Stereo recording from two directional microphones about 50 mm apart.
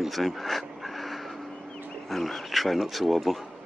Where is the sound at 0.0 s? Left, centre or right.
Centre.